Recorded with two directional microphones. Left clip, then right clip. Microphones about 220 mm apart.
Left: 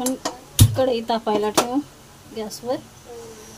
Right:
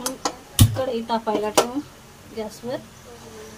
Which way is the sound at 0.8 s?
35° left (ahead or behind).